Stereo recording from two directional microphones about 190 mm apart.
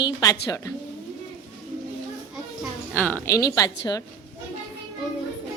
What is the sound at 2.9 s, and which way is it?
Speech, 10° left (ahead or behind).